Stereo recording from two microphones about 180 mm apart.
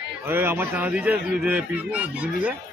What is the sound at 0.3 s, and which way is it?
A man's voice, 10° right (ahead or behind).